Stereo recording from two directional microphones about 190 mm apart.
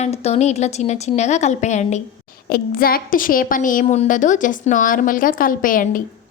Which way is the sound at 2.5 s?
50° left (ahead or behind).